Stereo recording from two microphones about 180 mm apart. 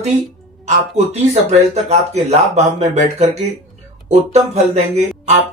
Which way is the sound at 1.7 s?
35° right (ahead or behind).